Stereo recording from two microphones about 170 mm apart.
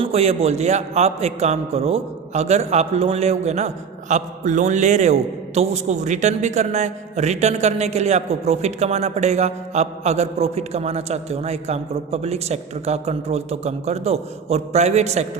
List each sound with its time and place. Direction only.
0.0 s a man's voice: 40° right (ahead or behind)